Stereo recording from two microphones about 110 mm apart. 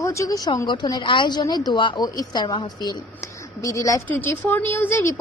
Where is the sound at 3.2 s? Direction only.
30° left (ahead or behind).